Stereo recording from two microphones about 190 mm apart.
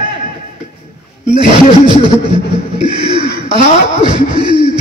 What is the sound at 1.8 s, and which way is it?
Speech, 25° right (ahead or behind).